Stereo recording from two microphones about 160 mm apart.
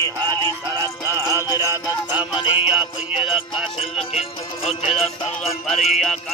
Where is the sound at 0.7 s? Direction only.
20° right (ahead or behind).